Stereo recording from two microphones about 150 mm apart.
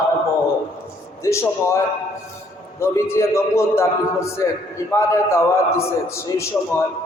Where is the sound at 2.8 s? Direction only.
20° left (ahead or behind).